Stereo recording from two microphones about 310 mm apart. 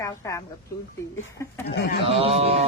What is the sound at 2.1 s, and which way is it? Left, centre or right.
Speech, centre.